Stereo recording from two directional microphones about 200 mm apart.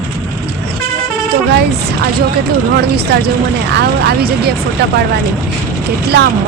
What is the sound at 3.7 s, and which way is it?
Speech, 55° right (ahead or behind).